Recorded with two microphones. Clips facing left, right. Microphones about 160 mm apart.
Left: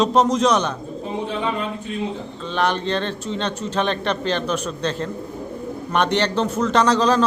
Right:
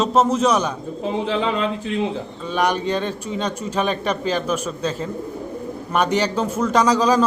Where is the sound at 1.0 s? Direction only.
90° right.